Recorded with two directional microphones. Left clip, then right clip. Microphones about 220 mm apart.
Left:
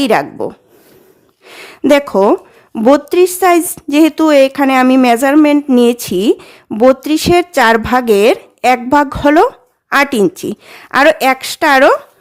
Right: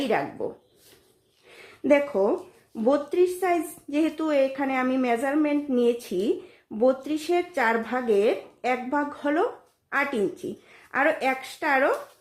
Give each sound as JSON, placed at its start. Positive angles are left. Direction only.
{"t": 0.0, "sound": "a woman's voice", "side_deg": 50}